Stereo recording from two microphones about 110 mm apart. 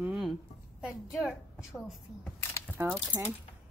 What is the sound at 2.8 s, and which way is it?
Speech, 20° right (ahead or behind).